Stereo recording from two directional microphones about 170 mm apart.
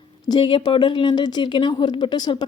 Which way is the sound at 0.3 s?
30° left (ahead or behind).